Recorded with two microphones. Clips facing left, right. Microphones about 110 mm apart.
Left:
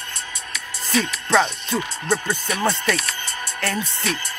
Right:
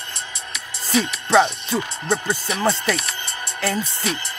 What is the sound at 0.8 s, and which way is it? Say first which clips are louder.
Speech: right 1 dB; 15° right (ahead or behind).